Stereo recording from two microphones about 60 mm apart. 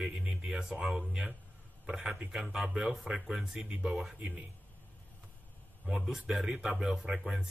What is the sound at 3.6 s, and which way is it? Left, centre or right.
Speech, centre.